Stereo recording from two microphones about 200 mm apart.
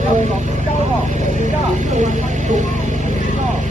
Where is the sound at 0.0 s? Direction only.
35° right (ahead or behind).